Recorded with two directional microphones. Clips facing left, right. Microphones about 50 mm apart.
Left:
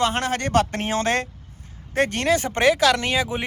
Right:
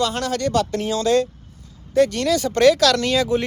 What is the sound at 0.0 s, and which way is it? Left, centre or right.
Speech, left.